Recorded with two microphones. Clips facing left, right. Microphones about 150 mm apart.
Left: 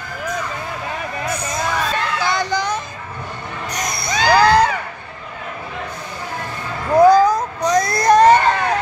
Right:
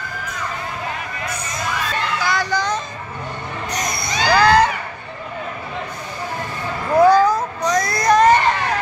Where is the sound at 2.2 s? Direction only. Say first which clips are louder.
Even; 20° left (ahead or behind).